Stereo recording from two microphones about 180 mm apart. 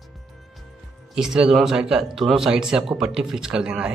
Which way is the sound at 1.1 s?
5° right (ahead or behind).